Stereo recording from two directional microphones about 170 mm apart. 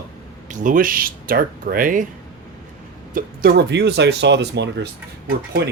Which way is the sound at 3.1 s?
65° right (ahead or behind).